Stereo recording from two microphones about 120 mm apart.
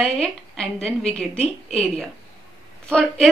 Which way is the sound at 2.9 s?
5° left (ahead or behind).